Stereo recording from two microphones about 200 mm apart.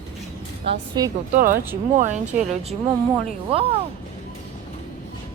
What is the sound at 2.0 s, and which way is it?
Speech, 35° right (ahead or behind).